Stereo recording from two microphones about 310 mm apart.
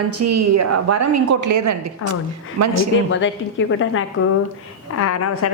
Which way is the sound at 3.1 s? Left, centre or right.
Left.